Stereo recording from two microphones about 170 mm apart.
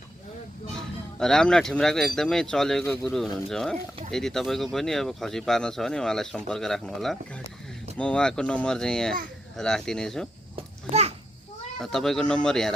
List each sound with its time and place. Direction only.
1.2 s speech: 5° left (ahead or behind)
10.5 s children playing: 40° right (ahead or behind)
11.8 s speech: centre (ahead or behind)